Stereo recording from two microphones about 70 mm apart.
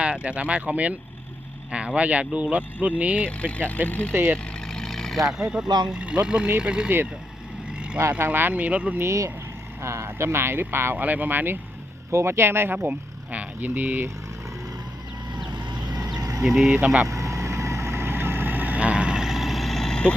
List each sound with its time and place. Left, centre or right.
0.0 s speech: centre
3.2 s speech: centre
4.1 s speech: right
4.6 s vehicle: centre
5.2 s speech: centre
5.6 s speech: right
5.9 s speech: centre
8.2 s speech: right
9.0 s speech: right
12.1 s speech: right
15.4 s vehicle: right
16.4 s speech: centre
16.6 s speech: centre
17.1 s vehicle: right; by 20.1 s centre